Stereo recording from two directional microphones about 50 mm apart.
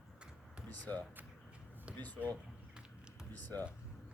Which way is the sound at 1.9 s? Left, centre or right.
Right.